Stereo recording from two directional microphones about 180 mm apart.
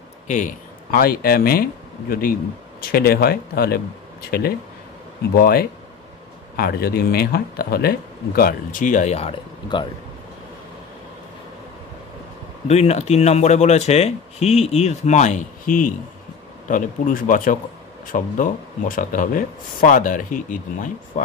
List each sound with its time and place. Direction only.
0.9 s speech: 55° left (ahead or behind); by 9.8 s 30° left (ahead or behind)
12.6 s speech: 35° left (ahead or behind)